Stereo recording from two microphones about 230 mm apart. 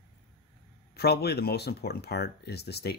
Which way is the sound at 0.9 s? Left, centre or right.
Left.